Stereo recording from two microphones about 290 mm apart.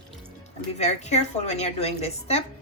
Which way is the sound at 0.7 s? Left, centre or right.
Left.